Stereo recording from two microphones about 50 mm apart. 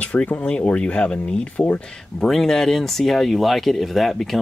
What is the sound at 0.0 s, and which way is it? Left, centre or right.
Speech, left.